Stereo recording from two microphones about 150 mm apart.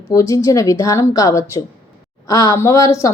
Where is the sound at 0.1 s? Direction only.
20° left (ahead or behind).